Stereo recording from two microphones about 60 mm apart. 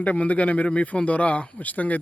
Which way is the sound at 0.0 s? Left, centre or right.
Left.